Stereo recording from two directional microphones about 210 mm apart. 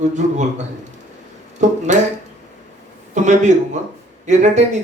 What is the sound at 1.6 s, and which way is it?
Speech, 35° right (ahead or behind).